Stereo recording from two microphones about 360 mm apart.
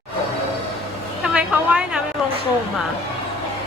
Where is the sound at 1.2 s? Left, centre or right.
Centre.